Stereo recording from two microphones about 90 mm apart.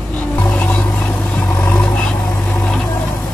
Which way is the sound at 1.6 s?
15° left (ahead or behind).